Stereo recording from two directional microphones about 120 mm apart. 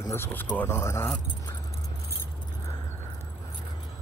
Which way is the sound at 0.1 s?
15° left (ahead or behind).